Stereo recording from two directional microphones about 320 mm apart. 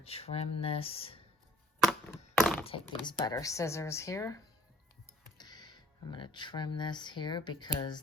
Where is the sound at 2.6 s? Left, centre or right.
Centre.